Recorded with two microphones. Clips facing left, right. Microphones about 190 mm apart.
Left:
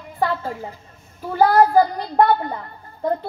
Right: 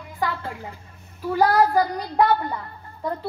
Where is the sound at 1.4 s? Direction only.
45° left (ahead or behind).